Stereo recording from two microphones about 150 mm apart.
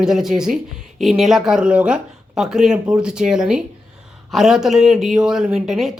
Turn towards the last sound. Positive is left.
turn(degrees=0)  # may be behind; listen again after turning